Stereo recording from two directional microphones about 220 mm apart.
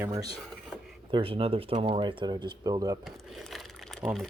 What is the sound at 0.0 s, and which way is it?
Speech, 15° right (ahead or behind).